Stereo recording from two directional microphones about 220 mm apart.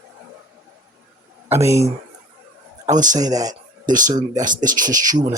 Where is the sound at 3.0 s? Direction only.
15° right (ahead or behind).